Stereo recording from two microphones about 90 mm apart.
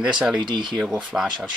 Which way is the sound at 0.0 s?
10° right (ahead or behind).